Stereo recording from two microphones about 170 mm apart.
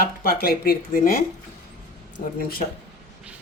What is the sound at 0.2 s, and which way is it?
Speech, 60° left (ahead or behind).